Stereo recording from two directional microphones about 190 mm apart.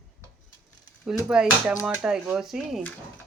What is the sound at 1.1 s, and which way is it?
Speech, 5° right (ahead or behind).